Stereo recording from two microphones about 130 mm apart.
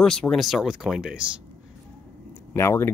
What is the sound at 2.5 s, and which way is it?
Speech, 20° left (ahead or behind).